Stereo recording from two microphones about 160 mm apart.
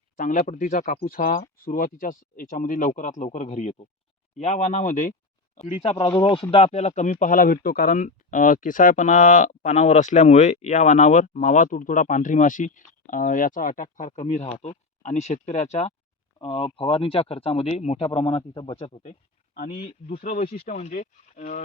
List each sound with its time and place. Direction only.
0.2 s speech: 55° left (ahead or behind)
5.7 s speech: 35° left (ahead or behind)
19.5 s speech: 65° left (ahead or behind)
20.7 s speech: 45° left (ahead or behind)